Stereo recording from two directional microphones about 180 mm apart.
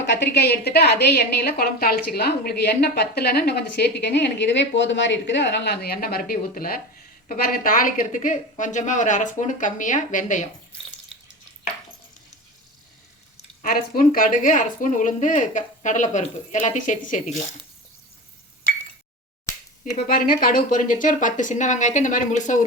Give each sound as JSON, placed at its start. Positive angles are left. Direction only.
{"t": 0.2, "sound": "a woman's voice", "side_deg": 65}
{"t": 13.6, "sound": "a woman's voice", "side_deg": 50}
{"t": 20.1, "sound": "a woman's voice", "side_deg": 55}